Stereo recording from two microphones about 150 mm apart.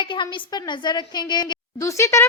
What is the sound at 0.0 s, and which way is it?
A child's voice, 30° left (ahead or behind).